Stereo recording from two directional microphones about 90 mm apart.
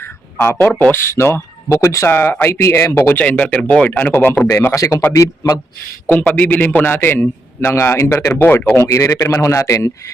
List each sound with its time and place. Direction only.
0.3 s a man's voice: 20° left (ahead or behind); by 2.0 s 35° left (ahead or behind)
2.0 s a man's voice: 25° left (ahead or behind)
3.2 s speech: 15° left (ahead or behind)
4.7 s a man's voice: 35° left (ahead or behind)
6.1 s a man's voice: 15° left (ahead or behind)
8.8 s a man's voice: 35° left (ahead or behind)